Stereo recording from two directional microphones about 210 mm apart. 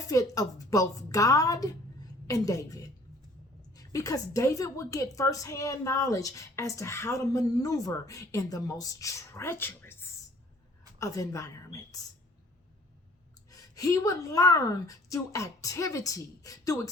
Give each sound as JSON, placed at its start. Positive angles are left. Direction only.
{"t": 0.1, "sound": "a woman's voice", "side_deg": 15}
{"t": 13.5, "sound": "a woman's voice", "side_deg": 15}